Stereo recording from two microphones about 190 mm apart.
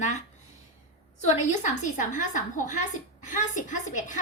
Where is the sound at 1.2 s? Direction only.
40° left (ahead or behind).